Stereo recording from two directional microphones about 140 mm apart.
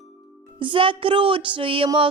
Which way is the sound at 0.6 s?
40° right (ahead or behind).